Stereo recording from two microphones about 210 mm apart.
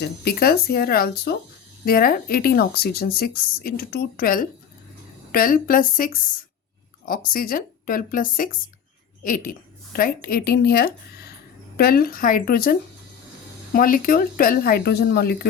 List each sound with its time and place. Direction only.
0.0 s a woman's voice: 45° left (ahead or behind)
13.7 s speech: 40° left (ahead or behind)